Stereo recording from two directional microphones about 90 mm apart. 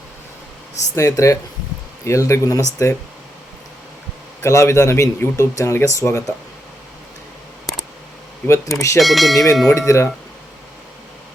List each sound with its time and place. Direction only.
0.9 s speech: 35° left (ahead or behind)
4.4 s speech: 35° left (ahead or behind)
8.4 s speech: 30° left (ahead or behind)
9.0 s speech: centre (ahead or behind)
9.6 s speech: 35° left (ahead or behind)